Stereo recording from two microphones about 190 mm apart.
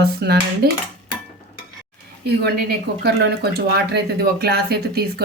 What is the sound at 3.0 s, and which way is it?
Speech, 60° right (ahead or behind).